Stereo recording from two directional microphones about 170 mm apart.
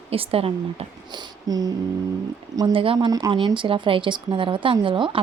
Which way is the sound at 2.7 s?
30° right (ahead or behind).